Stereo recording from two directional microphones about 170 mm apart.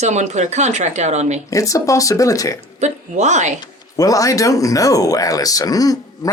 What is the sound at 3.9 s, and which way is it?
Speech, 20° left (ahead or behind).